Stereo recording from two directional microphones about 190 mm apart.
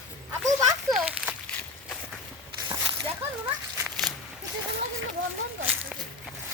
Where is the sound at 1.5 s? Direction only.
5° left (ahead or behind).